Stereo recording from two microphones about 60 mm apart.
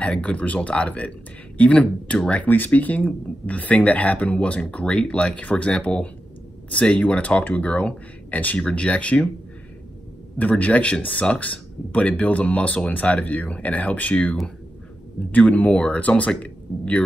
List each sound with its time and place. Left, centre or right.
0.0 s speech: centre
2.4 s speech: left
10.3 s speech: left
15.3 s speech: left